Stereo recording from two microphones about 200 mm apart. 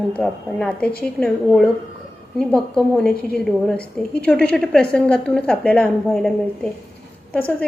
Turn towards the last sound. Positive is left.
turn(degrees=5)  # may be behind; listen again after turning